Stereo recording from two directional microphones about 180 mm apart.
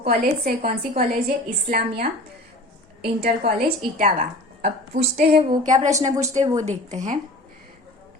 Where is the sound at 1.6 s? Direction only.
50° right (ahead or behind).